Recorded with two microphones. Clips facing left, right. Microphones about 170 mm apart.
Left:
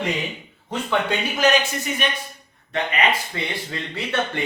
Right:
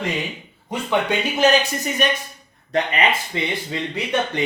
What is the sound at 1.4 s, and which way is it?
Speech, 40° right (ahead or behind).